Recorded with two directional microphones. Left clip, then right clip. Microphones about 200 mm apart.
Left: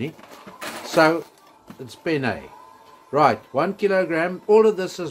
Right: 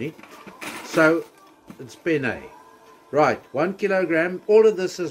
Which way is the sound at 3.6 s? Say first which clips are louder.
Left 1 dB; 25° left (ahead or behind).